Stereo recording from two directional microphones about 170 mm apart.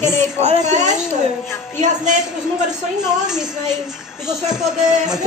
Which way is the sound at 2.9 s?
5° right (ahead or behind).